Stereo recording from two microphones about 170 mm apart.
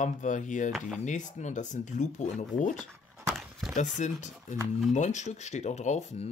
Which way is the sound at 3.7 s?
45° left (ahead or behind).